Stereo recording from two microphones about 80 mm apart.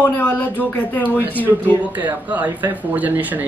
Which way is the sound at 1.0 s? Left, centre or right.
Right.